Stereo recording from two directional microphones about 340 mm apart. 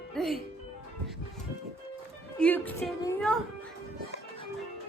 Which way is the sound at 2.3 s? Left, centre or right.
Centre.